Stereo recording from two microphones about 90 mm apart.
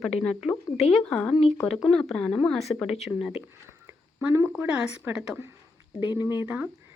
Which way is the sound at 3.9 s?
30° right (ahead or behind).